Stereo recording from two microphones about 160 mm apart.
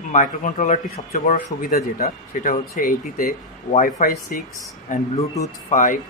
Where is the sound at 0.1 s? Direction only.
50° left (ahead or behind).